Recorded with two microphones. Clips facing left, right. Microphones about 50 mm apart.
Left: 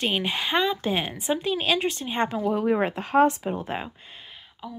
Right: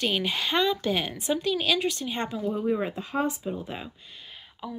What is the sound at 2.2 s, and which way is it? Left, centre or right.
Speech, left.